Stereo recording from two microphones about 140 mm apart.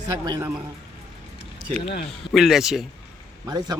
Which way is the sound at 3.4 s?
30° right (ahead or behind).